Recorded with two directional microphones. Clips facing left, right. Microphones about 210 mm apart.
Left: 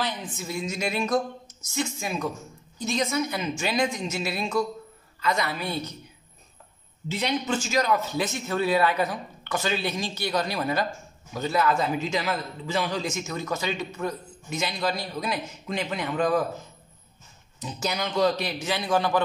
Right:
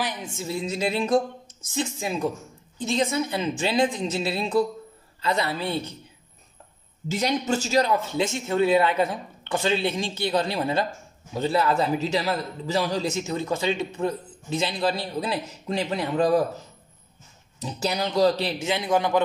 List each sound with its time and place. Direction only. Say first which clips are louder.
0.3 s a man's voice: right 3 dB; 30° right (ahead or behind)
7.1 s a man's voice: right 3 dB; 45° right (ahead or behind)
17.6 s a man's voice: right 3 dB; 35° right (ahead or behind)